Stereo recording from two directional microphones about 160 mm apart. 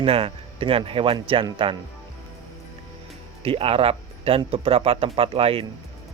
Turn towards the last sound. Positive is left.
turn(degrees=-35)  # may be behind; listen again after turning